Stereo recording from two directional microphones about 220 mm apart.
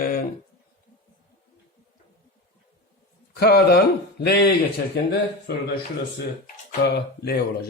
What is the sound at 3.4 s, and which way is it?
Speech, 45° left (ahead or behind).